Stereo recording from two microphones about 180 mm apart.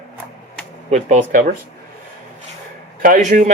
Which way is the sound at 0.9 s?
40° right (ahead or behind).